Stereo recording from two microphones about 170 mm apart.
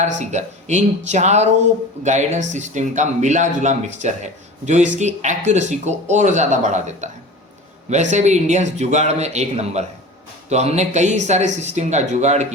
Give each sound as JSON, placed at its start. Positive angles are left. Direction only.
{"t": 0.0, "sound": "speech", "side_deg": -40}
{"t": 8.1, "sound": "speech", "side_deg": -45}